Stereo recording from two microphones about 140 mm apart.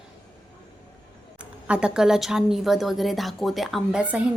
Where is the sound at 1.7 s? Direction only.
5° right (ahead or behind).